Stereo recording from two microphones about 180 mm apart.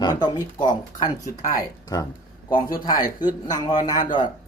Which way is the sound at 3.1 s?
25° left (ahead or behind).